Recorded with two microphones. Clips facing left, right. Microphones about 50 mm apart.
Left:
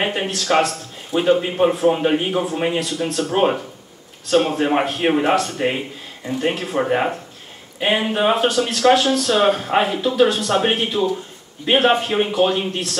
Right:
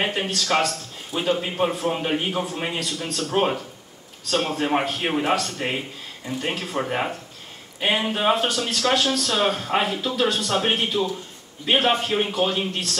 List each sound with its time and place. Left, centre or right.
0.0 s speech: centre
1.3 s speech: centre
1.7 s a man's voice: left
4.3 s a man's voice: centre
7.8 s a man's voice: centre